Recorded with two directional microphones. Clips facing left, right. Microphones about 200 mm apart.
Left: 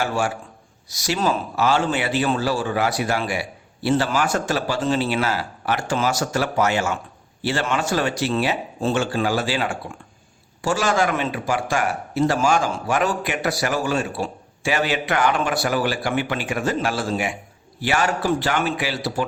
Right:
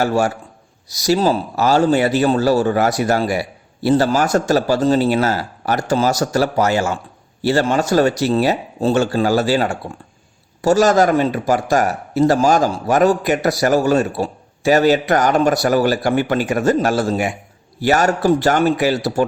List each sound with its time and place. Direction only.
0.0 s a man's voice: 40° right (ahead or behind)